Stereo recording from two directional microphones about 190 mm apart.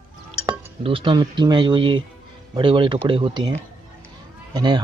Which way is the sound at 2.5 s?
25° right (ahead or behind).